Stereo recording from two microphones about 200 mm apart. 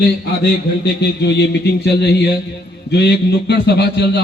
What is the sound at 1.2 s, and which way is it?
Speech, 55° left (ahead or behind).